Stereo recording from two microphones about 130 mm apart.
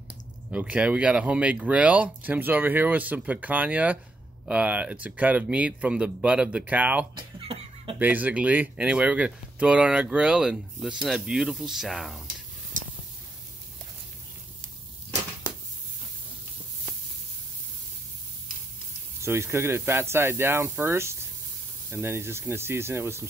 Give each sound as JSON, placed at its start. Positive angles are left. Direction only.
{"t": 0.1, "sound": "speech", "side_deg": -10}
{"t": 7.2, "sound": "cough", "side_deg": -40}
{"t": 8.0, "sound": "speech", "side_deg": -15}
{"t": 19.2, "sound": "speech", "side_deg": -20}